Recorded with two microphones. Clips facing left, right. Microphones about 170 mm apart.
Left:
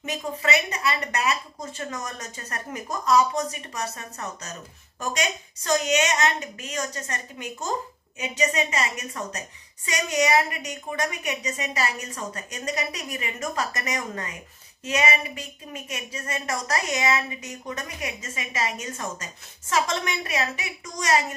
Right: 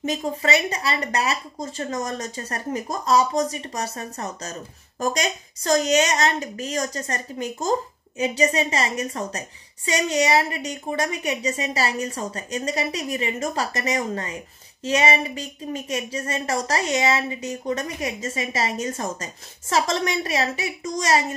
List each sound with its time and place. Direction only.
0.0 s speech: 30° right (ahead or behind)